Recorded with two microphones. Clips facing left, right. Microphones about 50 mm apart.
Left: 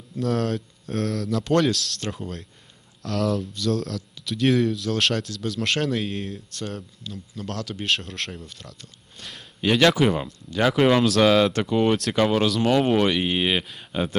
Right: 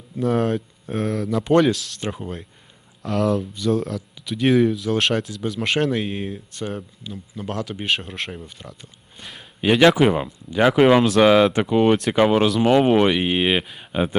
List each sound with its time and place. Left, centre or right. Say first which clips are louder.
0.2 s speech: right 4 dB; centre